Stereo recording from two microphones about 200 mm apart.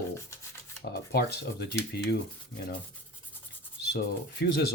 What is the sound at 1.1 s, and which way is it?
Speech, 55° left (ahead or behind).